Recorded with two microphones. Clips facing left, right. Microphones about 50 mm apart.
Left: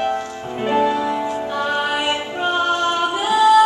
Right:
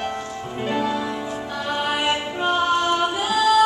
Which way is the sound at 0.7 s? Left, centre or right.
Left.